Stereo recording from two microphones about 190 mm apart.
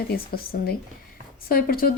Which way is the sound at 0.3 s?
50° left (ahead or behind).